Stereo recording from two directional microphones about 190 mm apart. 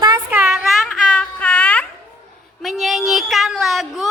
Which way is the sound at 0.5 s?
Centre (ahead or behind).